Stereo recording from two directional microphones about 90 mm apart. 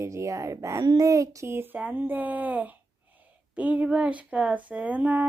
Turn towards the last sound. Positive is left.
turn(degrees=-15)  # may be behind; listen again after turning